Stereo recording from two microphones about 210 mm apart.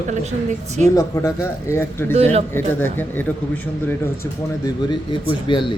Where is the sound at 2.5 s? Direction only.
10° left (ahead or behind).